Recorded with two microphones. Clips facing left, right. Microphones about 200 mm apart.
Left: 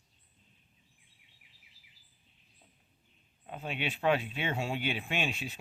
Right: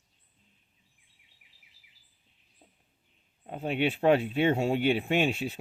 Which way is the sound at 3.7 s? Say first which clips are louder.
Right 6 dB; 55° right (ahead or behind).